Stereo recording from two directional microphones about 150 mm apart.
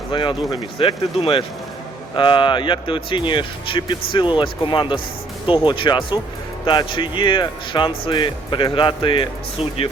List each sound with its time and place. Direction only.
0.1 s speech: 35° left (ahead or behind)